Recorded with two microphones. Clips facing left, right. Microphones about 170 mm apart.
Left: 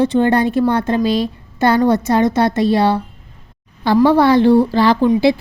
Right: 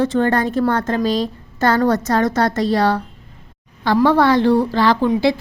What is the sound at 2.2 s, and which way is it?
Speech, 25° left (ahead or behind).